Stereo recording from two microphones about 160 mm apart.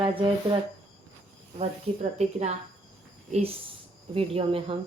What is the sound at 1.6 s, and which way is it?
Speech, 45° right (ahead or behind).